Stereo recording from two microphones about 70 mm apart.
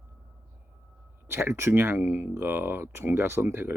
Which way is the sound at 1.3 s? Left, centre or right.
Right.